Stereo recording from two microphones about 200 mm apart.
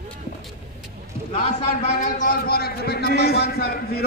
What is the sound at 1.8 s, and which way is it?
A man's voice, 40° left (ahead or behind).